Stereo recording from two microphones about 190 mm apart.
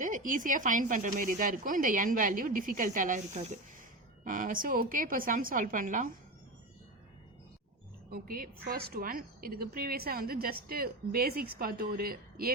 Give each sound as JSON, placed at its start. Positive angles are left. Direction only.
{"t": 0.0, "sound": "a woman's voice", "side_deg": -45}
{"t": 8.1, "sound": "a woman's voice", "side_deg": -50}